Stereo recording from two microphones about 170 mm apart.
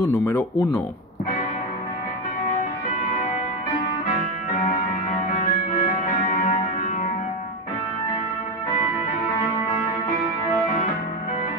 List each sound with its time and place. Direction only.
0.0 s speech: 15° left (ahead or behind)
4.6 s music: 50° left (ahead or behind)